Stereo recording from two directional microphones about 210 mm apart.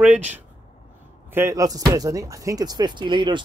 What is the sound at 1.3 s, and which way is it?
Speech, 15° right (ahead or behind).